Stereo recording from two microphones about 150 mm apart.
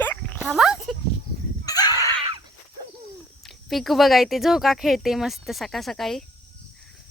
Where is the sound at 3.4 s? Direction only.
Centre (ahead or behind).